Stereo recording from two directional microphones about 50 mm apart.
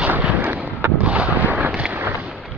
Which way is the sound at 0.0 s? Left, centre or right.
Right.